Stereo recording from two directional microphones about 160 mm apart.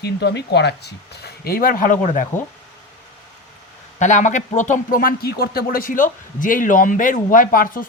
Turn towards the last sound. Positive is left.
turn(degrees=60)  # may be behind; listen again after turning